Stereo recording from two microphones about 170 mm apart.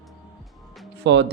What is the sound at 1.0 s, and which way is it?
Speech, 90° right.